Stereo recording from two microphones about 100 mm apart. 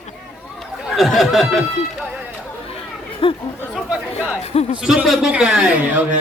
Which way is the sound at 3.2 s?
60° left (ahead or behind).